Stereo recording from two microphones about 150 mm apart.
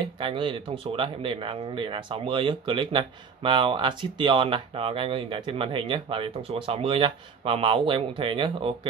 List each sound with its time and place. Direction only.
0.0 s speech: 35° right (ahead or behind)